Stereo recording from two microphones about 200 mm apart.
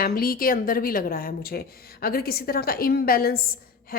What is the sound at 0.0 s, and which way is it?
A woman's voice, 45° left (ahead or behind).